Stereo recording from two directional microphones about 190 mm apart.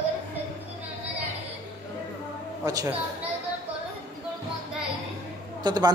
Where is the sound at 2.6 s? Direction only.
20° right (ahead or behind).